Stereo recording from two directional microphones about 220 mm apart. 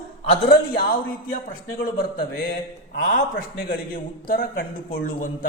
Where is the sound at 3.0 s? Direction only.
40° left (ahead or behind).